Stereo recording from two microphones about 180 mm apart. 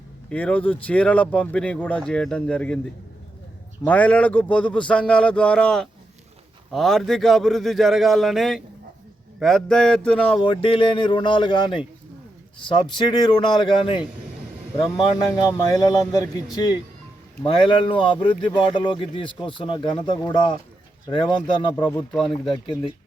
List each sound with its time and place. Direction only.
0.3 s speech: 5° left (ahead or behind)
3.8 s a man's voice: 10° left (ahead or behind)
10.5 s speech: 30° left (ahead or behind)
21.8 s a man's voice: 10° left (ahead or behind)